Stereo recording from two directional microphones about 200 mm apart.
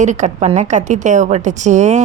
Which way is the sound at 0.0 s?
35° right (ahead or behind).